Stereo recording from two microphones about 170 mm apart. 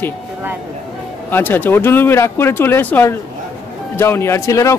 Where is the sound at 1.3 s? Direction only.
10° left (ahead or behind).